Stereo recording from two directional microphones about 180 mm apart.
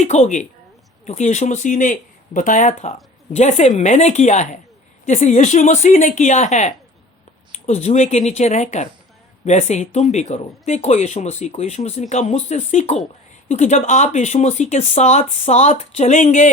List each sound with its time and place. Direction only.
0.0 s speech: 40° left (ahead or behind)